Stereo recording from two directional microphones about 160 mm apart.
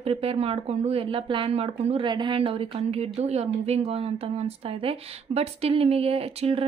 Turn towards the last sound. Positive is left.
turn(degrees=-35)  # may be behind; listen again after turning